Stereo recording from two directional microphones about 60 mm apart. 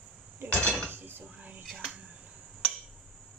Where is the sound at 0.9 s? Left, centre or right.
Right.